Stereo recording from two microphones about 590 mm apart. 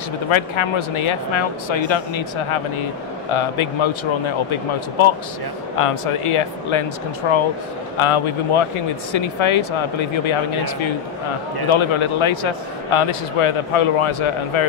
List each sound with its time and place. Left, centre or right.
0.3 s speech: left